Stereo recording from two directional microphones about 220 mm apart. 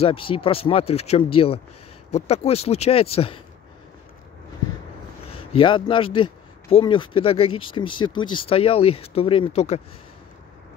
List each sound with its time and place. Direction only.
0.0 s a man's voice: 25° left (ahead or behind)
5.5 s a man's voice: 25° left (ahead or behind)